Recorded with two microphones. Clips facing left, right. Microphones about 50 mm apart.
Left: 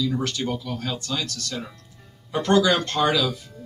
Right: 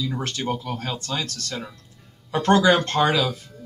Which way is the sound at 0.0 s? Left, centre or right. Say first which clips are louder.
Left 2 dB; right.